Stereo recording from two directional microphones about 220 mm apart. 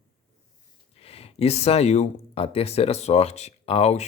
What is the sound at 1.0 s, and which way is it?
Speech, 25° left (ahead or behind).